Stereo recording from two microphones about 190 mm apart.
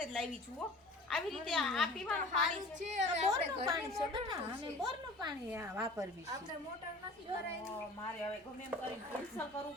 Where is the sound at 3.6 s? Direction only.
20° right (ahead or behind).